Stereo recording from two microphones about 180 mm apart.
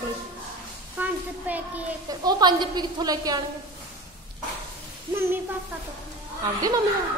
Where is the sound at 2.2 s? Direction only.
25° right (ahead or behind).